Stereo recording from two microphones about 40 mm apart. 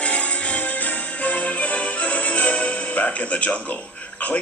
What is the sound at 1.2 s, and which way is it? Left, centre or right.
Music, left.